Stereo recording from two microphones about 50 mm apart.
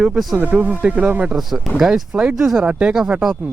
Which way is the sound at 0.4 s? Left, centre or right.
Right.